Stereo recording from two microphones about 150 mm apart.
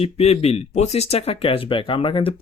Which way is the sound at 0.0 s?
45° left (ahead or behind).